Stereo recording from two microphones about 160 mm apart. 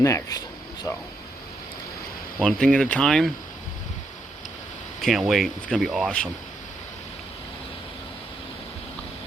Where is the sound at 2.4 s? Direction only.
5° left (ahead or behind).